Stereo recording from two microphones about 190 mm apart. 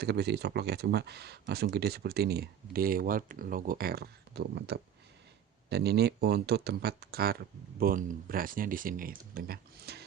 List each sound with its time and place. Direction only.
0.0 s speech: 60° right (ahead or behind)